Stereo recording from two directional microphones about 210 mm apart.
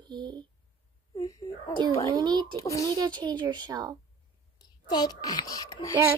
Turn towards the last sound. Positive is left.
turn(degrees=15)  # may be behind; listen again after turning